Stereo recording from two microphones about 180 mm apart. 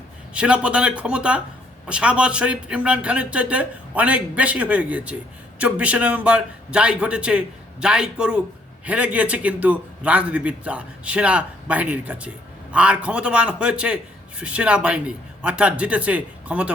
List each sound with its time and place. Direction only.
0.3 s a man's voice: 5° right (ahead or behind)